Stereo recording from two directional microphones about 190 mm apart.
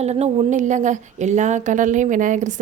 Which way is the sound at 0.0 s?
35° right (ahead or behind).